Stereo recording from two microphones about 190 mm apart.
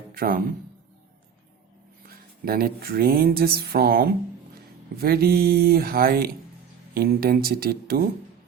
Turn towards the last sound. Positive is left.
turn(degrees=-50)  # may be behind; listen again after turning